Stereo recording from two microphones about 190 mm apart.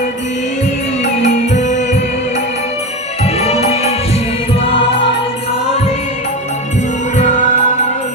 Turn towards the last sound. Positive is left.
turn(degrees=40)  # may be behind; listen again after turning